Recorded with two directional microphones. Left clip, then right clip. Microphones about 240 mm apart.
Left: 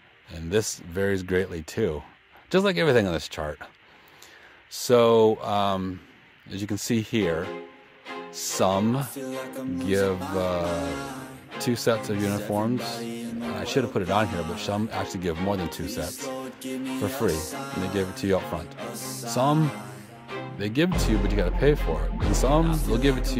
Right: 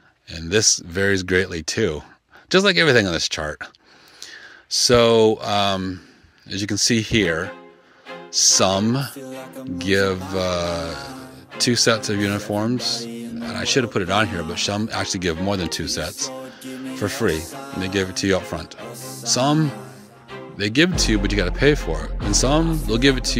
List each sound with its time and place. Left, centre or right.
0.3 s speech: right
8.5 s speech: right
9.1 s speech: centre
9.8 s speech: right
11.0 s music: centre
11.5 s speech: right
16.3 s music: centre
17.3 s speech: centre
17.8 s speech: right
18.9 s music: centre
19.2 s speech: right
19.6 s speech: centre
20.5 s speech: right